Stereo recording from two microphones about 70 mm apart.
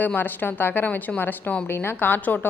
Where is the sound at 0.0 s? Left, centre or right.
Left.